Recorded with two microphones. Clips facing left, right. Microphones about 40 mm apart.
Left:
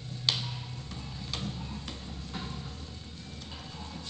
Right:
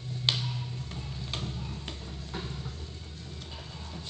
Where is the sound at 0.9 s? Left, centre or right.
Right.